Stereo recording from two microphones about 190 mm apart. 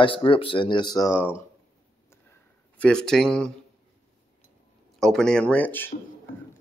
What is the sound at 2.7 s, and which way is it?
Speech, 5° left (ahead or behind).